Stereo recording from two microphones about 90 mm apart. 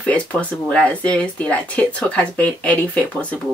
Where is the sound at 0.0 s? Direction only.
15° left (ahead or behind).